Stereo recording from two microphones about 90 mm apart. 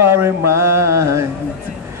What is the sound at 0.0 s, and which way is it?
Mantra, 25° right (ahead or behind).